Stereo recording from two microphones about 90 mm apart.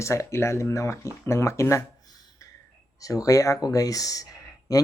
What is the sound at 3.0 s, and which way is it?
Speech, 40° left (ahead or behind).